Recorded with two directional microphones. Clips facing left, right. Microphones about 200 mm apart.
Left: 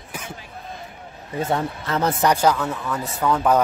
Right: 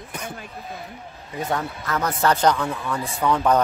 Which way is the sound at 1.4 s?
25° left (ahead or behind).